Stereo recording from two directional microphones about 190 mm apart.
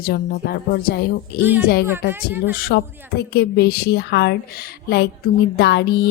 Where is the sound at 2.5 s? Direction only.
50° left (ahead or behind).